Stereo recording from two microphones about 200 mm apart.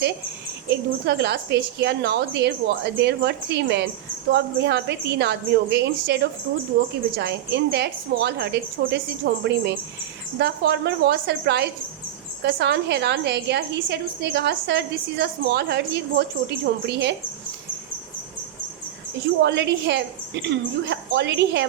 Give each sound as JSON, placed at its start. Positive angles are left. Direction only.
{"t": 0.7, "sound": "a woman's voice", "side_deg": -55}
{"t": 19.4, "sound": "a woman's voice", "side_deg": -60}